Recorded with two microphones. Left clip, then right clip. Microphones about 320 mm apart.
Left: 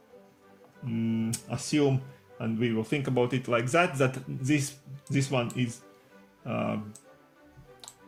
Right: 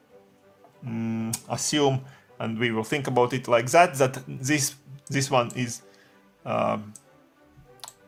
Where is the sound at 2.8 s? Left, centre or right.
Centre.